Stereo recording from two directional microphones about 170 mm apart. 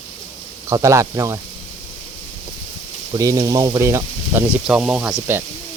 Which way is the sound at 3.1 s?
20° right (ahead or behind).